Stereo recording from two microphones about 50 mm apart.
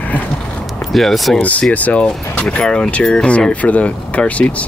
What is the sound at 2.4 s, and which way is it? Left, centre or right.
Speech, centre.